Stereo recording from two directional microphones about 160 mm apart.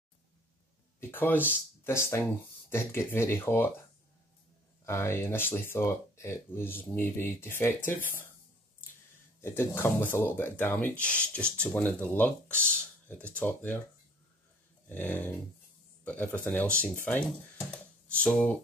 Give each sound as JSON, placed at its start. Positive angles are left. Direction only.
{"t": 1.1, "sound": "speech", "side_deg": 15}
{"t": 4.8, "sound": "speech", "side_deg": 15}
{"t": 9.4, "sound": "speech", "side_deg": 15}
{"t": 14.9, "sound": "speech", "side_deg": 10}